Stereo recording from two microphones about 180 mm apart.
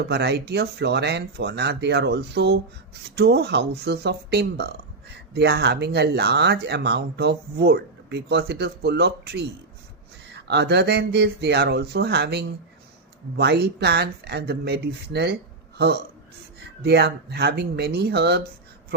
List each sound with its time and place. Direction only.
0.1 s speech: 70° right (ahead or behind)